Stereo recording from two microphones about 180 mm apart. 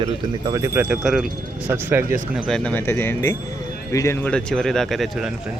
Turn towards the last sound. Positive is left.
turn(degrees=0)  # may be behind; listen again after turning